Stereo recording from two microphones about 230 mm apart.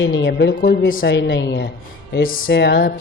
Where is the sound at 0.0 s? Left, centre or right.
Left.